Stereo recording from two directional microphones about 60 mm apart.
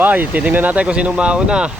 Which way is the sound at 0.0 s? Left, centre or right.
Right.